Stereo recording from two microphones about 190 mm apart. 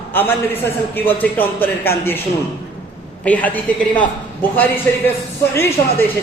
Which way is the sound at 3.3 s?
10° left (ahead or behind).